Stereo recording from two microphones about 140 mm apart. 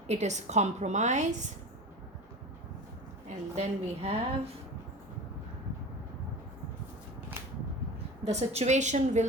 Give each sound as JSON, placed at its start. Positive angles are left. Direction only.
{"t": 0.1, "sound": "a woman's voice", "side_deg": -55}
{"t": 3.2, "sound": "a woman's voice", "side_deg": -55}
{"t": 8.2, "sound": "a woman's voice", "side_deg": -50}